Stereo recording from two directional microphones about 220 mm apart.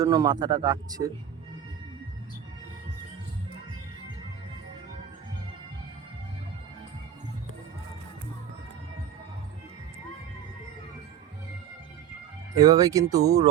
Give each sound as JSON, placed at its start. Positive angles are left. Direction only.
{"t": 0.0, "sound": "speech", "side_deg": -15}
{"t": 12.5, "sound": "speech", "side_deg": -15}